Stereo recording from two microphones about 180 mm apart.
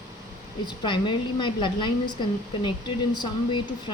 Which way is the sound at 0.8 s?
25° left (ahead or behind).